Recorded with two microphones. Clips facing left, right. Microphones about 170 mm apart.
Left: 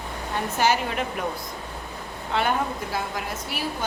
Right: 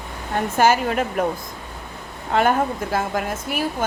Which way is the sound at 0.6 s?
50° right (ahead or behind).